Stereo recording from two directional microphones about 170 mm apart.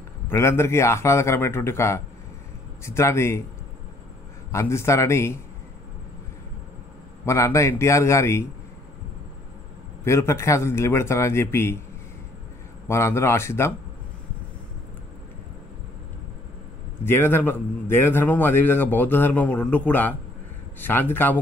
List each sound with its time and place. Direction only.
0.3 s a man's voice: 15° left (ahead or behind)
4.5 s a man's voice: 15° left (ahead or behind)
7.2 s a man's voice: 15° left (ahead or behind)
10.0 s a man's voice: 15° left (ahead or behind)
12.8 s a man's voice: 15° left (ahead or behind)
17.0 s a man's voice: 15° left (ahead or behind)